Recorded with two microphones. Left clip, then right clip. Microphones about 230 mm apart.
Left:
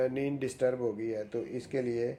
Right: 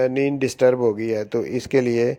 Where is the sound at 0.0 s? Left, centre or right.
Right.